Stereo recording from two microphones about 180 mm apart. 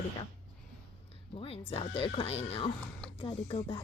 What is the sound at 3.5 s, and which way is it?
Music, 30° left (ahead or behind).